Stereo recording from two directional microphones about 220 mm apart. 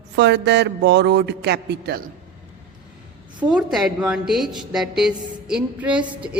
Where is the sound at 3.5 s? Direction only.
Centre (ahead or behind).